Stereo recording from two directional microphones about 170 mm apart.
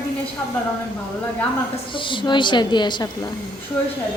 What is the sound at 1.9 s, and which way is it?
A woman's voice, 30° left (ahead or behind).